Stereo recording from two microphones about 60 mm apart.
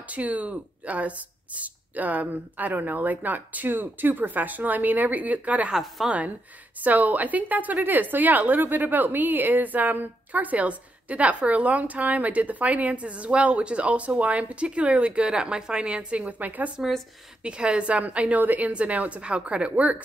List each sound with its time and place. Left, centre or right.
0.1 s a woman's voice: right
5.7 s a woman's voice: centre
6.0 s a woman's voice: right
17.4 s a woman's voice: centre